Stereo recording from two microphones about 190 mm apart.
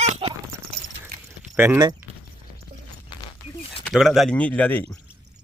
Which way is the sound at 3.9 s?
Centre (ahead or behind).